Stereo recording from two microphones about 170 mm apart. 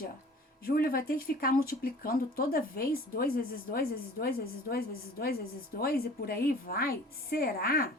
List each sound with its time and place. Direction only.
0.6 s speech: 60° left (ahead or behind)